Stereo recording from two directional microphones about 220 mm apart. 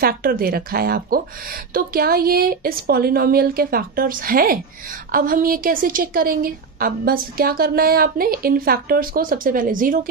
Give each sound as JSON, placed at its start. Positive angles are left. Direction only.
{"t": 0.0, "sound": "a woman's voice", "side_deg": -40}